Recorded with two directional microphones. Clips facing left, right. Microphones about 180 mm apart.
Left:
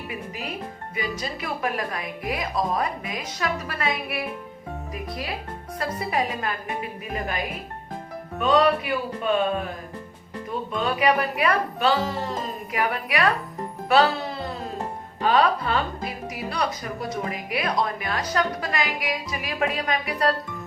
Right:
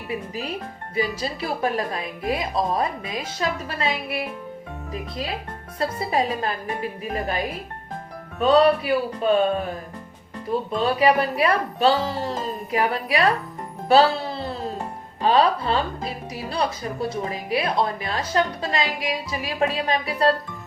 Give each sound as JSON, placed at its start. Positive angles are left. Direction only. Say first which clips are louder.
{"t": 0.9, "sound": "speech", "louder": "right 5 dB", "side_deg": -30}
{"t": 5.8, "sound": "speech", "louder": "right 3 dB", "side_deg": -30}
{"t": 10.5, "sound": "speech", "louder": "right 4 dB", "side_deg": -30}
{"t": 13.8, "sound": "music", "louder": "right 3 dB", "side_deg": -30}
{"t": 15.2, "sound": "speech", "louder": "right 2 dB", "side_deg": -30}